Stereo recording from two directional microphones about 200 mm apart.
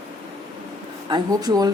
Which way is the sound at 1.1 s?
20° right (ahead or behind).